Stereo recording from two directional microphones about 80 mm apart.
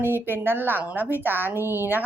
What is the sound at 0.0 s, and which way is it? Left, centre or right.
Speech, right.